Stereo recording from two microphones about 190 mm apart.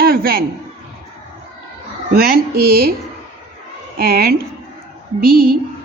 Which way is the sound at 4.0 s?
55° right (ahead or behind).